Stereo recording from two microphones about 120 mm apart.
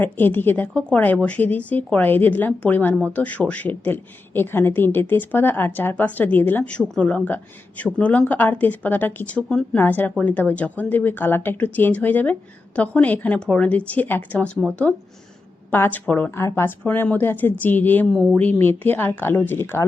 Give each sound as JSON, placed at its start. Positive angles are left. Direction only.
{"t": 0.0, "sound": "a woman's voice", "side_deg": 15}